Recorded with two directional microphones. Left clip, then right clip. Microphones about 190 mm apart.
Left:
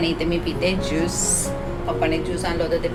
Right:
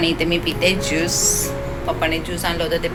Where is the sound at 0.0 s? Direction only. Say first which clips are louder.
Right 4 dB; 5° right (ahead or behind).